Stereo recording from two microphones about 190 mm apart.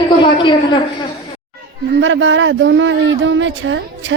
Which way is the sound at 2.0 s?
90° right.